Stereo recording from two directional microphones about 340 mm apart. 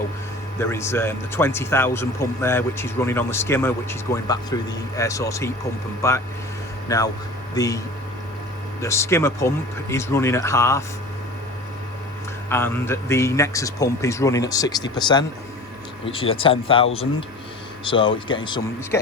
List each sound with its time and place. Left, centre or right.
0.6 s speech: centre
8.8 s speech: centre
12.5 s speech: centre